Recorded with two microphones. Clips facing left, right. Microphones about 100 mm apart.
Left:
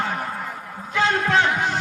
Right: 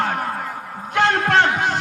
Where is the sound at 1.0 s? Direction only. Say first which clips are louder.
Right 3 dB; 60° right (ahead or behind).